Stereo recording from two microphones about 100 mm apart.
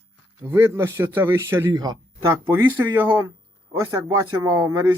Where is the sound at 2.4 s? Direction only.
25° right (ahead or behind).